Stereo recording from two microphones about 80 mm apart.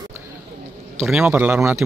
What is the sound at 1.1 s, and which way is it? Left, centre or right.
Speech, centre.